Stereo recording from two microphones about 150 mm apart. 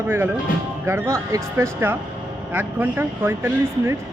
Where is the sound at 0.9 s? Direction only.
20° right (ahead or behind).